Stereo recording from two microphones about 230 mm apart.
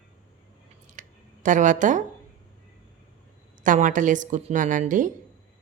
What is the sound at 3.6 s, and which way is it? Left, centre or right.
Speech, right.